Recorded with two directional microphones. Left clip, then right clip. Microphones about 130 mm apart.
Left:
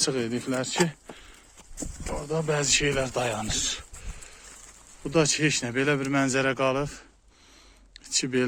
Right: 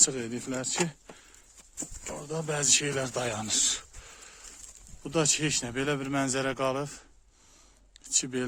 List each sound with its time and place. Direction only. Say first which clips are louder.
0.0 s a man's voice: left 2 dB; 15° right (ahead or behind)
2.1 s speech: left 6 dB; 25° right (ahead or behind); by 4.4 s 55° right (ahead or behind)
5.0 s a man's voice: left 4 dB; 25° right (ahead or behind)
7.9 s speech: left 5 dB; centre (ahead or behind)